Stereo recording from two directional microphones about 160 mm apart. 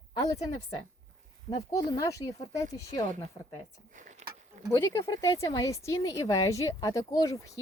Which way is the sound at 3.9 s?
50° right (ahead or behind).